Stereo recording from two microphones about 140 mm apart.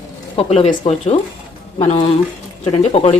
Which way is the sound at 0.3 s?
50° left (ahead or behind).